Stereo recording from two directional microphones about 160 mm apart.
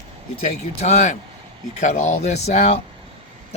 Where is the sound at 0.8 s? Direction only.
45° left (ahead or behind).